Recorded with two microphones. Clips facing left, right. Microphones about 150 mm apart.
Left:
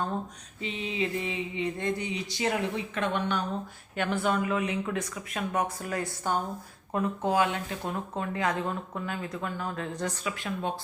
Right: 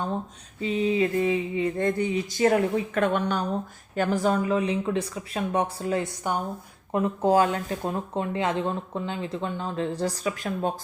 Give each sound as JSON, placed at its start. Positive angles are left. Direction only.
{"t": 0.6, "sound": "a sound", "side_deg": -40}
{"t": 3.9, "sound": "a woman's voice", "side_deg": -40}
{"t": 7.2, "sound": "speech", "side_deg": -40}